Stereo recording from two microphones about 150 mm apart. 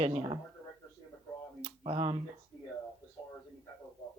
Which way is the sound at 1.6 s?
35° right (ahead or behind).